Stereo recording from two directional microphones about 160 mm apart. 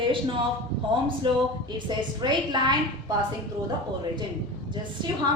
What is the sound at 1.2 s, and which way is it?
A woman's voice, 30° right (ahead or behind).